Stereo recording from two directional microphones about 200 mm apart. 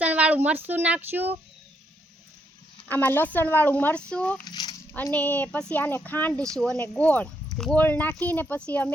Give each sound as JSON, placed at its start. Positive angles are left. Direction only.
{"t": 0.0, "sound": "speech", "side_deg": -5}
{"t": 2.9, "sound": "speech", "side_deg": 10}
{"t": 4.4, "sound": "a sound", "side_deg": 20}
{"t": 4.9, "sound": "speech", "side_deg": 10}